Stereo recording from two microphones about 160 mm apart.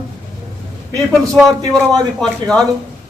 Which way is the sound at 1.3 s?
5° left (ahead or behind).